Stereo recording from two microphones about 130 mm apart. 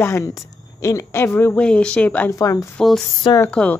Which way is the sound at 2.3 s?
25° left (ahead or behind).